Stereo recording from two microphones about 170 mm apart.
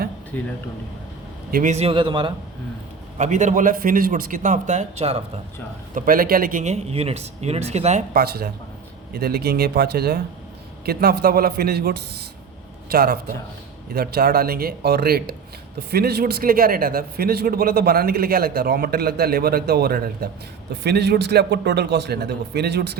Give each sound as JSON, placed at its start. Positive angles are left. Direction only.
{"t": 0.3, "sound": "speech", "side_deg": 10}
{"t": 1.5, "sound": "a man's voice", "side_deg": -60}
{"t": 1.7, "sound": "speech", "side_deg": -35}
{"t": 3.2, "sound": "speech", "side_deg": -45}
{"t": 5.9, "sound": "speech", "side_deg": -55}
{"t": 8.2, "sound": "a man's voice", "side_deg": -65}